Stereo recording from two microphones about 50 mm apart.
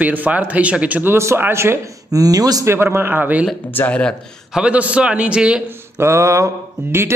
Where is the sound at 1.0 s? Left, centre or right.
Right.